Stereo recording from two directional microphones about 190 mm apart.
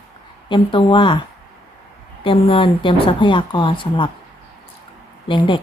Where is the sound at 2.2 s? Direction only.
30° left (ahead or behind).